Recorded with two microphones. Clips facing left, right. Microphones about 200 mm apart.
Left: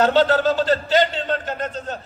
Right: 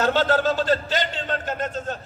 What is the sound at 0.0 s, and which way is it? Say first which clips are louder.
A man's voice: left 4 dB; 45° right (ahead or behind).